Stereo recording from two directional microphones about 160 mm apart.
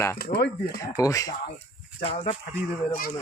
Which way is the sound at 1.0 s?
20° left (ahead or behind).